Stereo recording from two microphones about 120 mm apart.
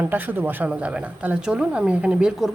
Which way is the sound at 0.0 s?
15° right (ahead or behind).